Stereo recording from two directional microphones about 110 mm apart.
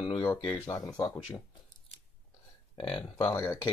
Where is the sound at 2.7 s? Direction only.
55° left (ahead or behind).